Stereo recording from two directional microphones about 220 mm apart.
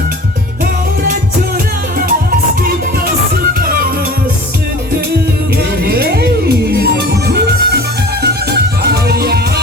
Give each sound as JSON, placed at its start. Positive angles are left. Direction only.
{"t": 3.6, "sound": "music", "side_deg": -40}
{"t": 5.8, "sound": "music", "side_deg": -45}